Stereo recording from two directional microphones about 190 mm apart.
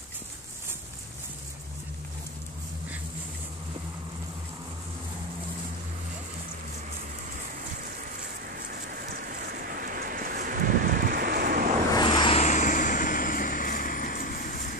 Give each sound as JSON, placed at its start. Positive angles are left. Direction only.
{"t": 8.2, "sound": "a sound", "side_deg": -45}
{"t": 11.9, "sound": "vehicle", "side_deg": 20}
{"t": 12.4, "sound": "vehicle", "side_deg": 40}